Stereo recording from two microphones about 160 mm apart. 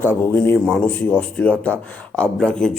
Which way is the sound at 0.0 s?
15° left (ahead or behind).